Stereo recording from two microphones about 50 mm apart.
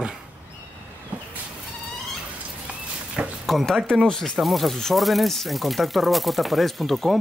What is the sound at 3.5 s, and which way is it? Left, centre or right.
Speech, centre.